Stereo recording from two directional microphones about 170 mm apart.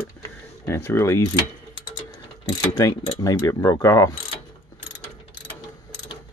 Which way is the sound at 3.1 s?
20° left (ahead or behind).